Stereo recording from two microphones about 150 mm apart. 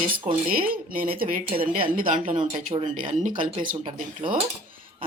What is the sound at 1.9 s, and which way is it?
Speech, 70° right (ahead or behind).